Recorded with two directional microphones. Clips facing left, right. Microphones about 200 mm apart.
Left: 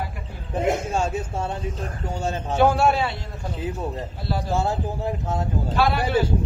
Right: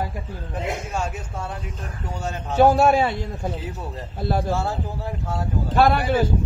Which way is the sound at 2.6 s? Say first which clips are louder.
Right 3 dB; 40° right (ahead or behind).